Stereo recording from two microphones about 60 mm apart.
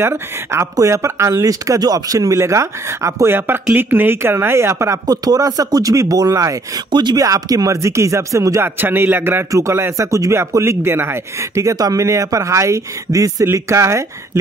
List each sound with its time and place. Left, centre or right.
0.0 s speech: right
3.3 s a man's voice: right
5.0 s a man's voice: right
8.8 s a man's voice: right
9.5 s speech: right
10.6 s speech: right
11.5 s speech: right
12.0 s speech: right
13.5 s speech: right